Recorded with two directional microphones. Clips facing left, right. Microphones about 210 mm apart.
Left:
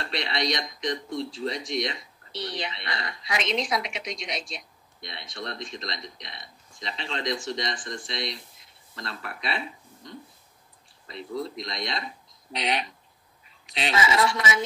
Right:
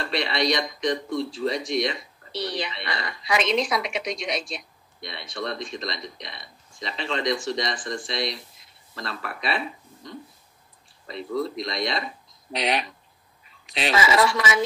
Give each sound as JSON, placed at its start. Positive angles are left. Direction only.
{"t": 0.0, "sound": "speech", "side_deg": -60}
{"t": 11.1, "sound": "speech", "side_deg": -65}
{"t": 13.7, "sound": "speech", "side_deg": -70}